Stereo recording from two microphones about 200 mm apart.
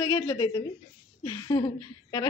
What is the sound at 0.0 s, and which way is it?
Speech, 25° left (ahead or behind).